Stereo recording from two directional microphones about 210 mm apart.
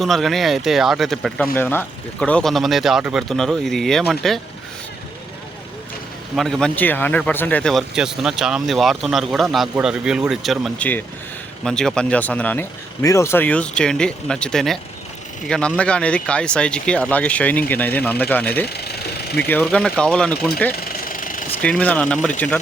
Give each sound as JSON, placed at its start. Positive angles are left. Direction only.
{"t": 0.0, "sound": "speech", "side_deg": 0}
{"t": 6.3, "sound": "speech", "side_deg": 0}
{"t": 20.8, "sound": "engine", "side_deg": 40}
{"t": 21.6, "sound": "speech", "side_deg": 5}